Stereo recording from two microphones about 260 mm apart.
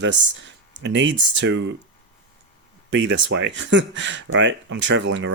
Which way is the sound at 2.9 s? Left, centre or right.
Right.